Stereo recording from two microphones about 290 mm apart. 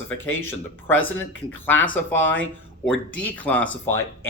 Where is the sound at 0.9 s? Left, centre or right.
Left.